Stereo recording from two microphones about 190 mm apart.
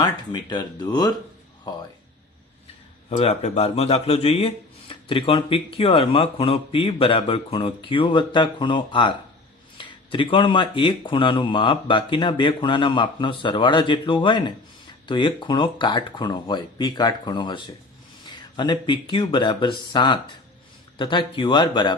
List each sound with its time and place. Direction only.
0.0 s speech: 20° left (ahead or behind)
3.1 s speech: 35° left (ahead or behind)